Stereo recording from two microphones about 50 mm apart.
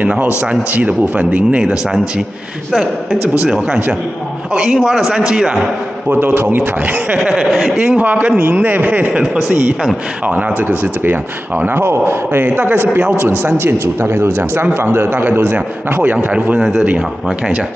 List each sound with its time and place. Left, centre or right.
0.0 s speech: right
3.6 s a man's voice: right
6.0 s a man's voice: right
7.2 s a man's voice: centre
8.0 s speech: right
9.1 s a man's voice: centre
9.5 s speech: right
11.8 s a man's voice: right
16.5 s a man's voice: centre